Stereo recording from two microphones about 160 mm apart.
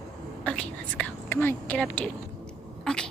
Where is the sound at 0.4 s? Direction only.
5° left (ahead or behind).